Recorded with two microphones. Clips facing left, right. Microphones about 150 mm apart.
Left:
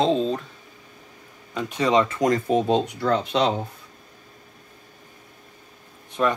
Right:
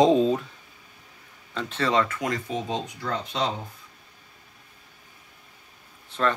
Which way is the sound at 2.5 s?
60° left (ahead or behind).